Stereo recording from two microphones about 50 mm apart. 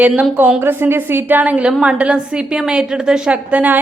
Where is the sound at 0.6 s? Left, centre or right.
Right.